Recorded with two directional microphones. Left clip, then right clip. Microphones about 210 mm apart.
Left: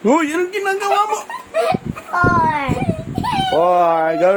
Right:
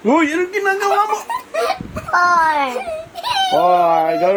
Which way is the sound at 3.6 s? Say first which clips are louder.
Even; 45° left (ahead or behind).